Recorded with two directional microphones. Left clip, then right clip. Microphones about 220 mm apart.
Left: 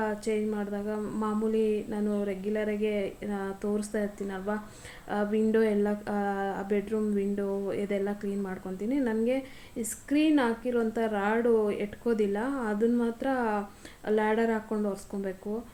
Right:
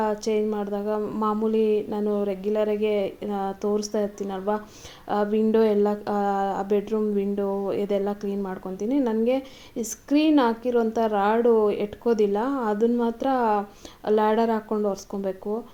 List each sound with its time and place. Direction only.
0.0 s speech: 35° right (ahead or behind)